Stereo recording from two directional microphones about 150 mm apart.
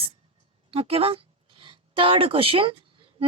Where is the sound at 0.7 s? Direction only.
40° right (ahead or behind).